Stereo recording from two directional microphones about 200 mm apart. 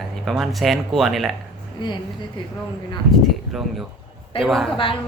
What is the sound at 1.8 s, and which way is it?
Speech, 25° left (ahead or behind).